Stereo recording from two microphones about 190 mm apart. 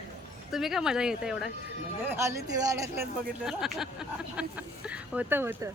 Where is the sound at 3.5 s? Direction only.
Centre (ahead or behind).